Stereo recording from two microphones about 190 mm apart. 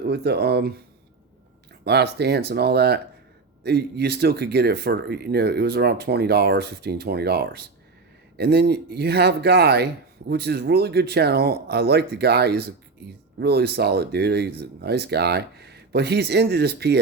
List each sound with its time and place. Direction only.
0.0 s speech: 60° right (ahead or behind)
1.8 s speech: 60° right (ahead or behind)